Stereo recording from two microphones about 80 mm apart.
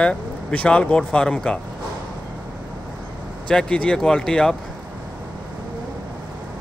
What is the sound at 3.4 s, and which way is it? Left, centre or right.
Speech, centre.